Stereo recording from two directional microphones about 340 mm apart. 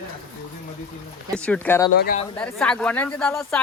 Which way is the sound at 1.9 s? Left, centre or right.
Left.